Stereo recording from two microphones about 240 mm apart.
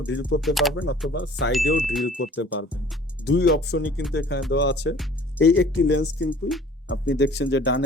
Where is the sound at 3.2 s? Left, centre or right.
Left.